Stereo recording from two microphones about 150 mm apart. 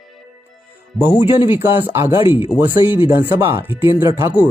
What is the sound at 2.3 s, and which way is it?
Speech, 35° left (ahead or behind).